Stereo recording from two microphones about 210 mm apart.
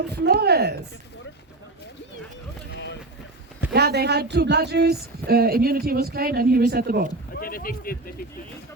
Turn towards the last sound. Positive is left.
turn(degrees=45)  # may be behind; listen again after turning